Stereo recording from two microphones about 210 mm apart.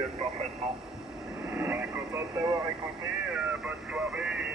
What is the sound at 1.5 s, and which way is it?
Vehicle, 5° right (ahead or behind).